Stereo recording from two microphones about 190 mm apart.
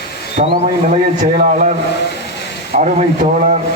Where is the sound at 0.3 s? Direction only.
35° right (ahead or behind).